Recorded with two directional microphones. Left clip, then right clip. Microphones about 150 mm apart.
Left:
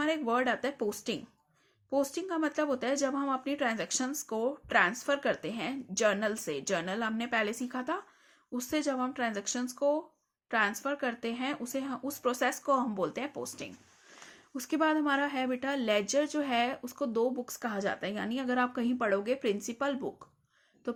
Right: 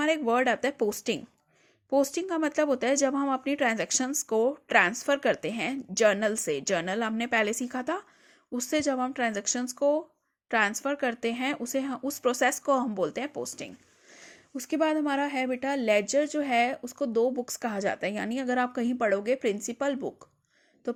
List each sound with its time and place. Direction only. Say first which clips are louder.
0.0 s speech: right 5 dB; 50° right (ahead or behind)
14.3 s a woman's voice: right 3 dB; 30° right (ahead or behind)
20.8 s a sound: right 4 dB; 35° right (ahead or behind)